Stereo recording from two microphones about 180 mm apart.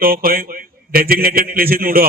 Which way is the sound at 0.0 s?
55° right (ahead or behind).